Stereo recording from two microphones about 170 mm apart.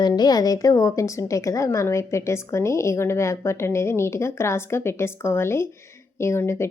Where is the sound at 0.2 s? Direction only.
25° left (ahead or behind).